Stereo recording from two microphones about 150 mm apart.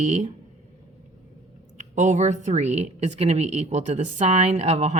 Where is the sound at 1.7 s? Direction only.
55° right (ahead or behind).